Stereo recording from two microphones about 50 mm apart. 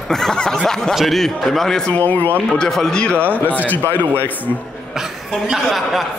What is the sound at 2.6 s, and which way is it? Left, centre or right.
Speech, centre.